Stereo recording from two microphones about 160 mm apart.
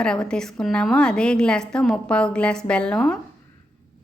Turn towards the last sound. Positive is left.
turn(degrees=5)  # may be behind; listen again after turning